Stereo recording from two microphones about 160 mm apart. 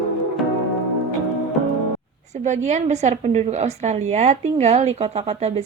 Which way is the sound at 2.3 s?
45° right (ahead or behind).